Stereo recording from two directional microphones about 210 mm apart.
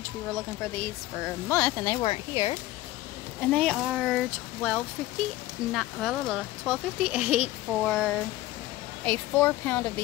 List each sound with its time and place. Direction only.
1.1 s speech: 5° left (ahead or behind)
2.0 s speech: 30° left (ahead or behind)
3.3 s speech: 5° left (ahead or behind)